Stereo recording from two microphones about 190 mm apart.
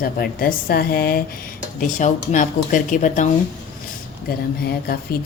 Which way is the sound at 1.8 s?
40° left (ahead or behind).